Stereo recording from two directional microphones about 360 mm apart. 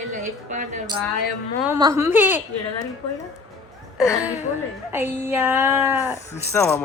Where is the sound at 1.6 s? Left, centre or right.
Centre.